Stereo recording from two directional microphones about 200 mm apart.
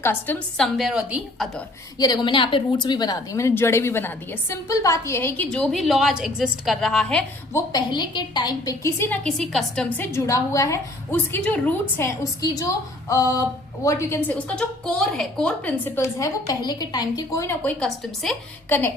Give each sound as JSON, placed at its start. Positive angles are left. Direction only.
{"t": 0.0, "sound": "a woman's voice", "side_deg": 10}
{"t": 2.0, "sound": "a woman's voice", "side_deg": 20}
{"t": 5.5, "sound": "a woman's voice", "side_deg": 0}
{"t": 7.7, "sound": "a woman's voice", "side_deg": 20}